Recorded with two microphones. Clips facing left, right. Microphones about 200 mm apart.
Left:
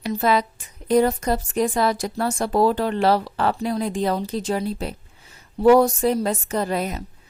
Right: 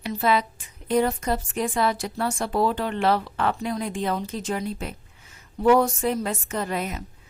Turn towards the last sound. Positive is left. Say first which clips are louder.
# left 4 dB
turn(degrees=35)  # may be behind; listen again after turning